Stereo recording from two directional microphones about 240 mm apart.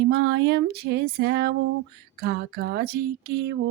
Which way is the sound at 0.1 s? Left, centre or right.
Right.